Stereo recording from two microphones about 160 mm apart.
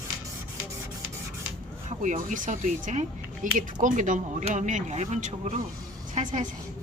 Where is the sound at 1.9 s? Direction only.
55° right (ahead or behind).